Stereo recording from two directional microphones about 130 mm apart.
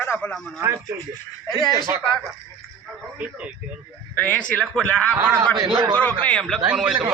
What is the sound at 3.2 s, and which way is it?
Speech, 10° right (ahead or behind).